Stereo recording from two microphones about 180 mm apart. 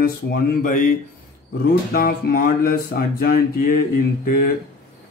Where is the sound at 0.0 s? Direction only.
50° left (ahead or behind).